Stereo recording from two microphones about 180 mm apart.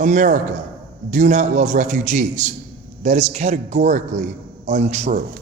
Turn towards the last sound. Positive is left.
turn(degrees=-40)  # may be behind; listen again after turning